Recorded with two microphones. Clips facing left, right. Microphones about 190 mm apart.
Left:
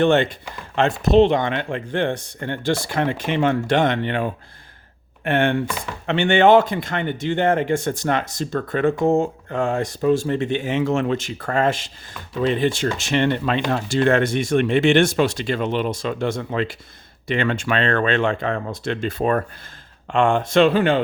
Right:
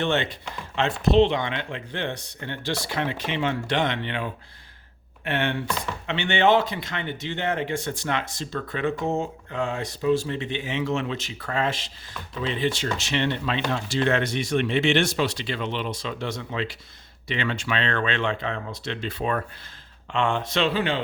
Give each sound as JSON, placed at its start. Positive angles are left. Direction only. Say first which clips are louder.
{"t": 0.0, "sound": "speech", "louder": "left 8 dB", "side_deg": 50}
{"t": 5.6, "sound": "chopping", "louder": "left 1 dB", "side_deg": 0}
{"t": 6.1, "sound": "speech", "louder": "left 7 dB", "side_deg": 50}